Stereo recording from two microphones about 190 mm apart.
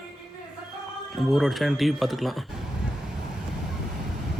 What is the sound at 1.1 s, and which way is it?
Speech, centre (ahead or behind).